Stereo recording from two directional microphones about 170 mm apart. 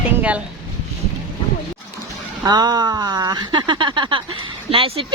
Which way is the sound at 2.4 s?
25° right (ahead or behind).